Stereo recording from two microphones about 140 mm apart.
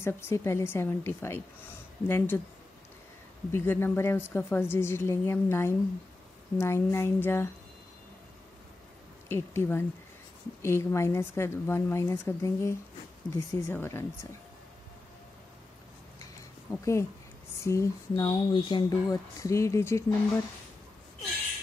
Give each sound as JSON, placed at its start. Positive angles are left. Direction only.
{"t": 0.0, "sound": "a woman's voice", "side_deg": 15}
{"t": 3.5, "sound": "a woman's voice", "side_deg": 15}
{"t": 9.3, "sound": "a woman's voice", "side_deg": 15}
{"t": 16.7, "sound": "speech", "side_deg": 20}